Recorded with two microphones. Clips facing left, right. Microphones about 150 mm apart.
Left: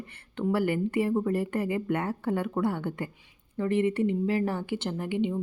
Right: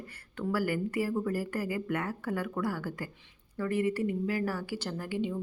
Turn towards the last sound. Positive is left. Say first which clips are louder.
# left 4 dB
turn(degrees=20)  # may be behind; listen again after turning